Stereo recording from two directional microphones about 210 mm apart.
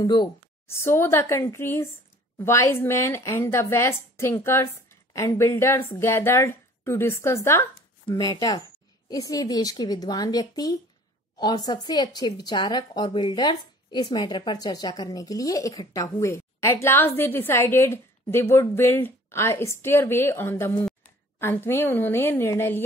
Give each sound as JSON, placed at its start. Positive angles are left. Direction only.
{"t": 0.0, "sound": "speech", "side_deg": 20}